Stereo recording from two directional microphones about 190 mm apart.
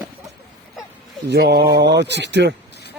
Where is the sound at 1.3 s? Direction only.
60° right (ahead or behind).